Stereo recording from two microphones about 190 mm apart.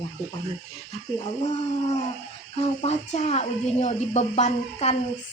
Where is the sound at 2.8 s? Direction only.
35° left (ahead or behind).